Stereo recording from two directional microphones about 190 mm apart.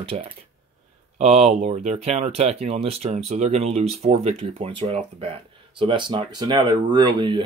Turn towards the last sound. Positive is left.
turn(degrees=-25)  # may be behind; listen again after turning